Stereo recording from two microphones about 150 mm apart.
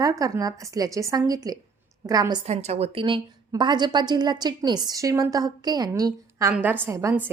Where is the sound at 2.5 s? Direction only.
45° right (ahead or behind).